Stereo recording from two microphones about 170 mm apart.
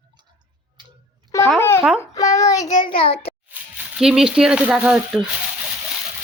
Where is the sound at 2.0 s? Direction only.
20° left (ahead or behind).